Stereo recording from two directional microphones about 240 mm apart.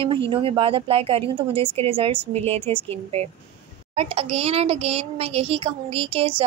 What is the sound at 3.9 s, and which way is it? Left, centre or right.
A woman's voice, right.